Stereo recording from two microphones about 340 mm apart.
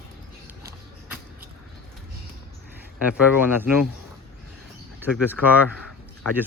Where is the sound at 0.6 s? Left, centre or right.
Centre.